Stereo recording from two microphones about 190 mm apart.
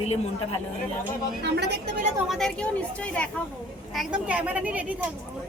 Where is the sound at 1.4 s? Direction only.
60° right (ahead or behind).